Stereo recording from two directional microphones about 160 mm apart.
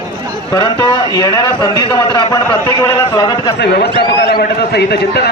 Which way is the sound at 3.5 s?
90° left.